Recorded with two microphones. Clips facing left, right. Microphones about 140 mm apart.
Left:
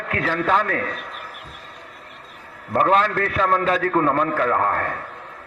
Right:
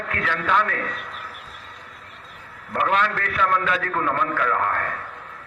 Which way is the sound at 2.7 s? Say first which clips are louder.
Left 4 dB; 35° left (ahead or behind).